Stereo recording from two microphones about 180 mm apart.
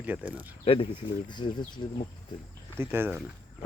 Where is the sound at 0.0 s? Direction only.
10° right (ahead or behind).